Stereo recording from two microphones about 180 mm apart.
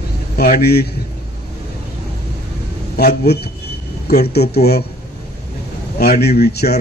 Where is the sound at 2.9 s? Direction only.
60° left (ahead or behind).